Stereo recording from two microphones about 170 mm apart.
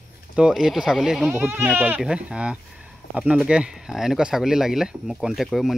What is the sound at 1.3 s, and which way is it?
Speech, 10° right (ahead or behind).